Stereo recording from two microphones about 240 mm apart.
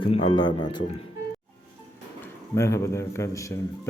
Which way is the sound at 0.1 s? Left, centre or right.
Left.